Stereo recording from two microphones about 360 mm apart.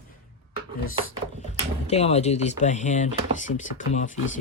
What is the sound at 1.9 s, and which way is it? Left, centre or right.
Speech, centre.